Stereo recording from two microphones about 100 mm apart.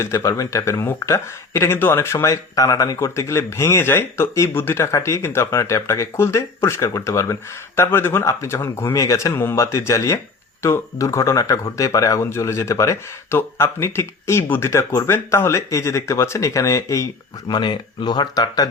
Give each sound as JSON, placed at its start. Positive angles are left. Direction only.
{"t": 0.0, "sound": "speech", "side_deg": 30}
{"t": 17.5, "sound": "speech", "side_deg": 45}